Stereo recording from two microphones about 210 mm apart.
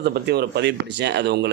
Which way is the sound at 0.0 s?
50° right (ahead or behind).